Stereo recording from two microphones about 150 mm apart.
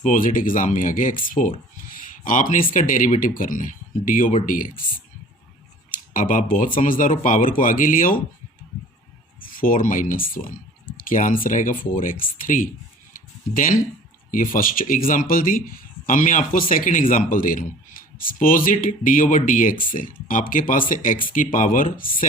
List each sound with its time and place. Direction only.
0.0 s a man's voice: 60° left (ahead or behind)
5.9 s a man's voice: 65° left (ahead or behind)
9.4 s speech: 70° left (ahead or behind)
13.1 s a sound: 65° left (ahead or behind)
14.3 s speech: 65° left (ahead or behind)
16.0 s a man's voice: 60° left (ahead or behind)